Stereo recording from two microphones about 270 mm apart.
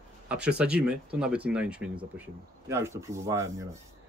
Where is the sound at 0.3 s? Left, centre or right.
Centre.